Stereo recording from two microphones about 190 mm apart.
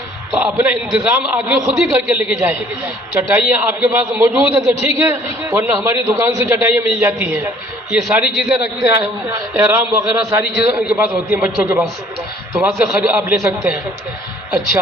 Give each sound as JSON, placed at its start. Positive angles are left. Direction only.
{"t": 0.3, "sound": "a man's voice", "side_deg": -10}